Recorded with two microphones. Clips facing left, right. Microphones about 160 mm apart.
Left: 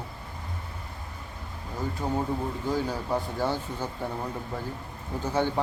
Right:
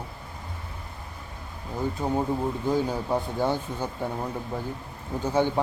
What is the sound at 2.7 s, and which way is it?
Speech, 15° right (ahead or behind).